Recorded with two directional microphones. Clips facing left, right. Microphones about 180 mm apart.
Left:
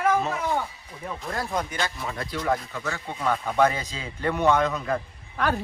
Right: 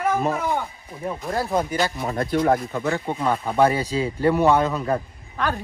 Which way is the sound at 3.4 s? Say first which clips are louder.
Right 4 dB; 35° right (ahead or behind).